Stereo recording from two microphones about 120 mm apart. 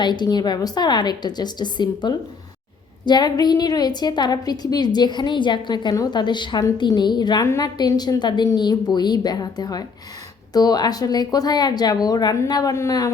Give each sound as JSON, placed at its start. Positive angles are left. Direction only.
{"t": 0.0, "sound": "a woman's voice", "side_deg": 35}
{"t": 7.4, "sound": "a woman's voice", "side_deg": 25}
{"t": 7.8, "sound": "a woman's voice", "side_deg": 35}